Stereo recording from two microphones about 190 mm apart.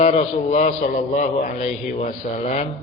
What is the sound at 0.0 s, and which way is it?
A man's voice, 40° left (ahead or behind).